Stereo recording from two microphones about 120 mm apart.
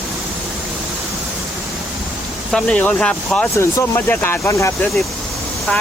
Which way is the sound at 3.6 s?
20° left (ahead or behind).